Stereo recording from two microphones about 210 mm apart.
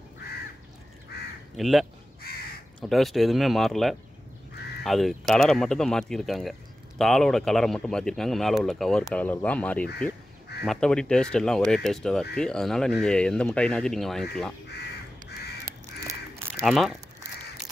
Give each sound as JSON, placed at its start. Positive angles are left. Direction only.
{"t": 1.6, "sound": "speech", "side_deg": 0}
{"t": 16.6, "sound": "speech", "side_deg": 0}